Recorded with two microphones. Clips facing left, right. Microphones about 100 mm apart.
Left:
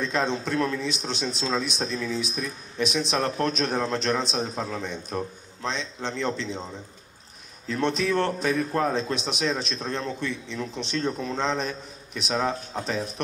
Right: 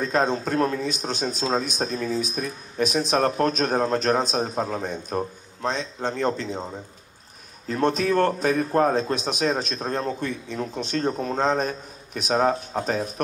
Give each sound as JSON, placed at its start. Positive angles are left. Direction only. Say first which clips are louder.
{"t": 0.0, "sound": "a man's voice", "louder": "right 3 dB", "side_deg": -45}